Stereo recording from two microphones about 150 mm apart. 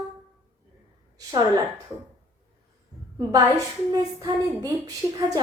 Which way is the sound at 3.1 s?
25° right (ahead or behind).